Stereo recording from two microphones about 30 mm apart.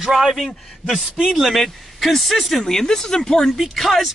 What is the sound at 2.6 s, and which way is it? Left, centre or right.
Speech, centre.